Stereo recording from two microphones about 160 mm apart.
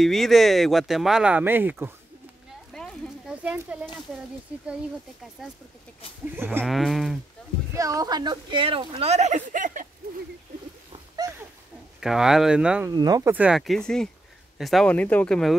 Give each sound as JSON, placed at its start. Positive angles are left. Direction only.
{"t": 0.0, "sound": "speech", "side_deg": 0}
{"t": 2.7, "sound": "a sound", "side_deg": 5}
{"t": 3.4, "sound": "speech", "side_deg": -10}
{"t": 6.2, "sound": "speech", "side_deg": -10}
{"t": 6.6, "sound": "speech", "side_deg": 0}
{"t": 7.7, "sound": "speech", "side_deg": -20}
{"t": 10.9, "sound": "a sound", "side_deg": -25}
{"t": 12.0, "sound": "speech", "side_deg": -5}
{"t": 12.8, "sound": "speech", "side_deg": -25}
{"t": 13.3, "sound": "speech", "side_deg": -5}